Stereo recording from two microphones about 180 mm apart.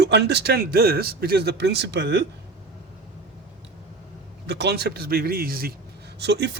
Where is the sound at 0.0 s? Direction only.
70° right (ahead or behind).